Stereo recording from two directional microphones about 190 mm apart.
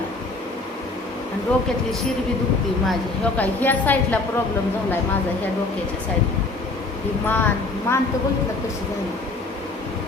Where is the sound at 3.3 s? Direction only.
10° left (ahead or behind).